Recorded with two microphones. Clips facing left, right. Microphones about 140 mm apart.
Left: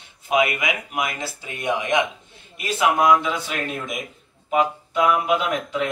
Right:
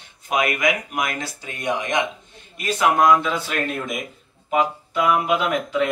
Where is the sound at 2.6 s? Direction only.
10° left (ahead or behind).